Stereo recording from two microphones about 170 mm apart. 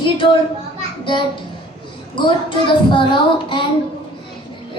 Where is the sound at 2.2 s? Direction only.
30° left (ahead or behind).